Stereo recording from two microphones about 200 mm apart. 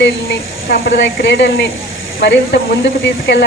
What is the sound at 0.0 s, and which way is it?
Speech, 55° left (ahead or behind).